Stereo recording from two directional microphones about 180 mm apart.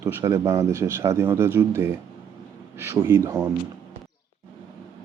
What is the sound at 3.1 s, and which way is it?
Speech, 15° right (ahead or behind).